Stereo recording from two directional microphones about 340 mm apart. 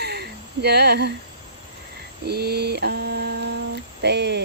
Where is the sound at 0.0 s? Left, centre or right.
Right.